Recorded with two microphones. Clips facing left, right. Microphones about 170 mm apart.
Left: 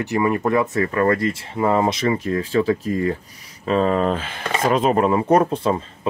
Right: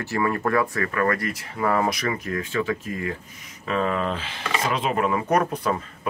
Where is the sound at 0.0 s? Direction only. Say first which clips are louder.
Left 4 dB; 20° left (ahead or behind).